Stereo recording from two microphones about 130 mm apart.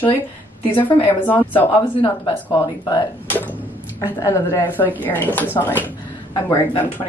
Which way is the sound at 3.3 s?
15° left (ahead or behind).